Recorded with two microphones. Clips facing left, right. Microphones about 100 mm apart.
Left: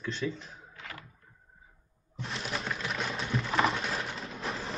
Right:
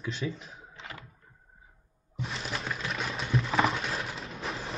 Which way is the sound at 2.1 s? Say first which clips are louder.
Even; centre (ahead or behind).